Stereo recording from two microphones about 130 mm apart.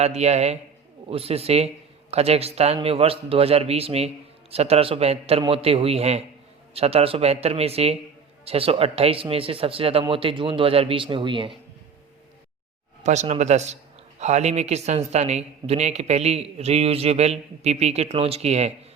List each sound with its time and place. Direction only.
0.0 s speech: 55° right (ahead or behind); by 11.5 s 40° right (ahead or behind)
13.0 s speech: 60° right (ahead or behind)